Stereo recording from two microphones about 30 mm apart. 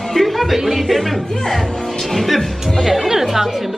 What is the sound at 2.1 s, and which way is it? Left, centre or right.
Speech, centre.